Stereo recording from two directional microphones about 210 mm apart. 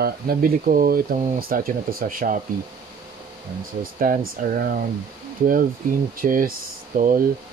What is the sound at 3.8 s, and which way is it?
Speech, 45° right (ahead or behind).